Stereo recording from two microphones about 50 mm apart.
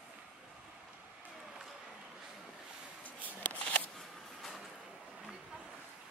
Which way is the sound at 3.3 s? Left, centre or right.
Left.